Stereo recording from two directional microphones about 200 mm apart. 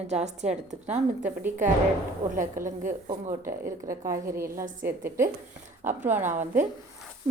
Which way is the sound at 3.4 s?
15° right (ahead or behind).